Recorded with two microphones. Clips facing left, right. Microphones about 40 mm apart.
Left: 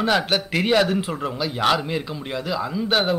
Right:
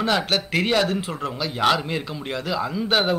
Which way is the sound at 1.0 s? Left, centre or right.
Centre.